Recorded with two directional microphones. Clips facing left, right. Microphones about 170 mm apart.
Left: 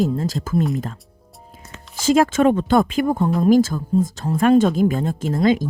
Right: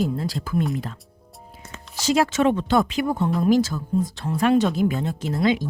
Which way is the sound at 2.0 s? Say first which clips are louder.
Left 4 dB; 50° left (ahead or behind).